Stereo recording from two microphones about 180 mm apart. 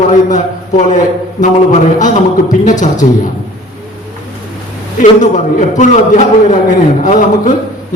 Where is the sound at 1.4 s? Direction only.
45° left (ahead or behind).